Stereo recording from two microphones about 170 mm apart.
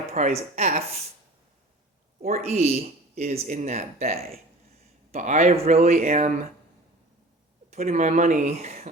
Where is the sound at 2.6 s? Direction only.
40° right (ahead or behind).